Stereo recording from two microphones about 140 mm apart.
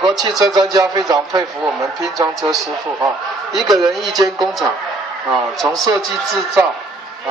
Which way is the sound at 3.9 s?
Centre (ahead or behind).